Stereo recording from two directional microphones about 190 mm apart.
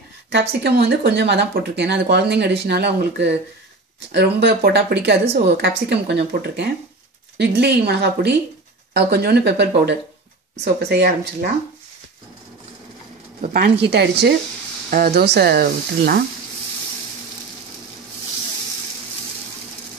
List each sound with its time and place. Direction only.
0.3 s speech: 60° right (ahead or behind)
13.4 s speech: 55° right (ahead or behind)